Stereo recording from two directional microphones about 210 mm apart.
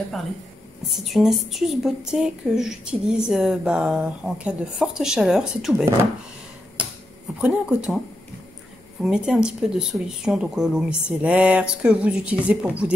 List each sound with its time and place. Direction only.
1.0 s a woman's voice: centre (ahead or behind)
7.3 s a woman's voice: 5° right (ahead or behind)
9.0 s a woman's voice: 5° right (ahead or behind)